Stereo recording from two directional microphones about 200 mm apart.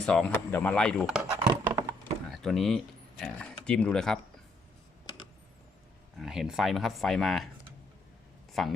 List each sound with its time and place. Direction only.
0.0 s speech: 5° left (ahead or behind)
1.4 s a sound: 20° right (ahead or behind)
2.3 s speech: centre (ahead or behind)
5.0 s a sound: 25° left (ahead or behind)
6.1 s speech: centre (ahead or behind)
8.6 s speech: centre (ahead or behind)